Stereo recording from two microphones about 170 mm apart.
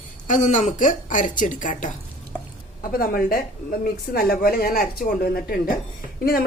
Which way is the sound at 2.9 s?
55° left (ahead or behind).